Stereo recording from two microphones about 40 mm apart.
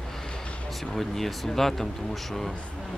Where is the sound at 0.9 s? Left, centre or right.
Centre.